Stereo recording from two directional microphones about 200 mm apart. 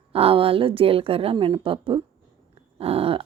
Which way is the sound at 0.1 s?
30° right (ahead or behind).